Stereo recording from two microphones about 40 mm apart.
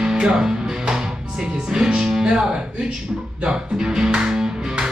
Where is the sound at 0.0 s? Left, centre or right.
Centre.